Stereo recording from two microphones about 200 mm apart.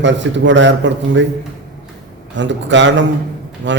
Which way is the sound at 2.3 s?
65° right (ahead or behind).